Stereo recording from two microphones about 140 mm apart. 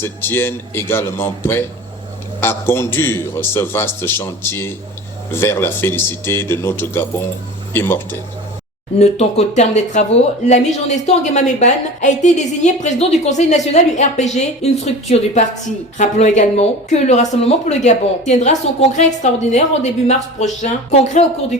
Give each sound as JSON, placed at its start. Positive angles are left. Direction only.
{"t": 0.0, "sound": "a man's voice", "side_deg": 15}
{"t": 9.0, "sound": "speech", "side_deg": 50}